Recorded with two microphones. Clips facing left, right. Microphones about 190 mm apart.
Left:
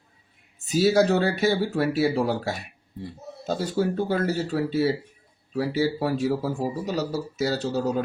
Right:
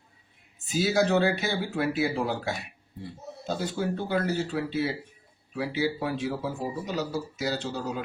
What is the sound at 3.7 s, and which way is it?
Speech, 40° left (ahead or behind).